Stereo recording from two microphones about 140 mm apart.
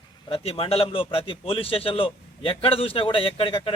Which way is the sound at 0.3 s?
40° left (ahead or behind).